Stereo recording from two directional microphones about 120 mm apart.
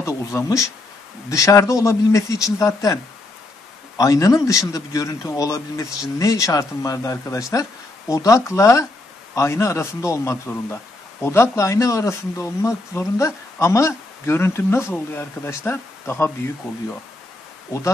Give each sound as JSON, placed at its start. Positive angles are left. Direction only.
{"t": 0.0, "sound": "a man's voice", "side_deg": 25}
{"t": 4.0, "sound": "a man's voice", "side_deg": 30}